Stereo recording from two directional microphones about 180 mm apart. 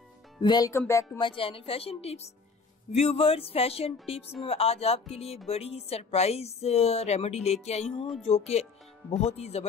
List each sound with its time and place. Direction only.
0.4 s speech: 25° left (ahead or behind)
1.2 s a woman's voice: 30° left (ahead or behind)